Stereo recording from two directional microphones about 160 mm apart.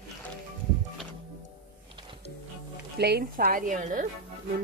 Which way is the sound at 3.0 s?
90° right.